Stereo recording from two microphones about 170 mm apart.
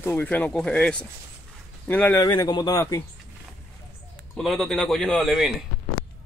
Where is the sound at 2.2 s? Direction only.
25° left (ahead or behind).